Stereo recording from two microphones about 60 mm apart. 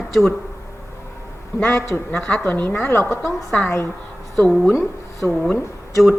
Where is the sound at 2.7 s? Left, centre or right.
Left.